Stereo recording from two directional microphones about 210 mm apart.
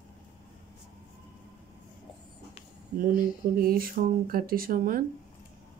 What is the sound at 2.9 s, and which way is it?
Speech, 40° right (ahead or behind).